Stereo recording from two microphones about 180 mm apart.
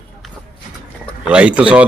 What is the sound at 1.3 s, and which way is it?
Speech, 5° right (ahead or behind).